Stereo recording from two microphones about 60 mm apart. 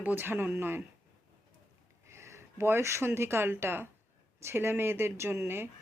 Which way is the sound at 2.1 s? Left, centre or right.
Right.